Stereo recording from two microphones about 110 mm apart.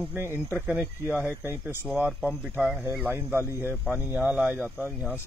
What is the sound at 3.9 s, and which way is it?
Speech, 20° right (ahead or behind).